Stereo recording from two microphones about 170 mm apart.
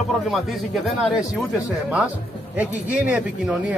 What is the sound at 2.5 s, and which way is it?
Speech, 10° right (ahead or behind).